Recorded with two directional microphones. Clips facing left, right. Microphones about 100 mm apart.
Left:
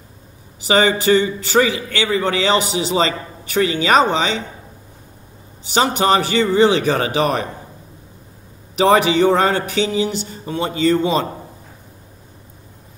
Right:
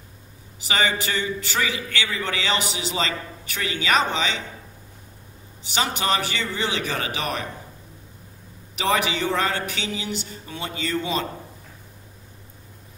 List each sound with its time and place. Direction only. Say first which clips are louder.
0.7 s a man's voice: left 10 dB; 40° left (ahead or behind)
1.9 s a man's voice: left 9 dB; 40° left (ahead or behind)
5.7 s a man's voice: left 8 dB; 30° left (ahead or behind)
8.7 s a man's voice: left 10 dB; 35° left (ahead or behind)